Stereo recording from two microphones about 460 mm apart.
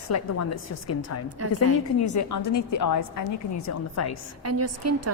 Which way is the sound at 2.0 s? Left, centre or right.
Left.